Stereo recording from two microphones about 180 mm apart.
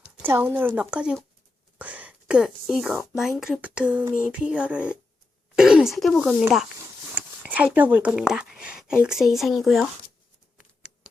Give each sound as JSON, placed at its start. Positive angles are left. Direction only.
{"t": 0.2, "sound": "a woman's voice", "side_deg": -10}